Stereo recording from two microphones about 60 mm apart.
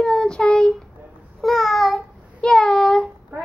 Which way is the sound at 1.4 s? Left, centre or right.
Centre.